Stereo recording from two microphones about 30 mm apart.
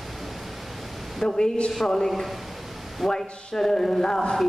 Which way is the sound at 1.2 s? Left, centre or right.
Left.